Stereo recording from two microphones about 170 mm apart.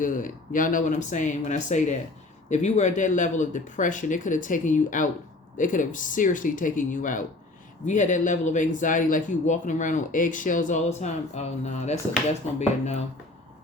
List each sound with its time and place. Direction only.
0.0 s speech: 50° left (ahead or behind)